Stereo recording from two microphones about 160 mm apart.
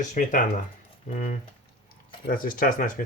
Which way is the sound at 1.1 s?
60° left (ahead or behind).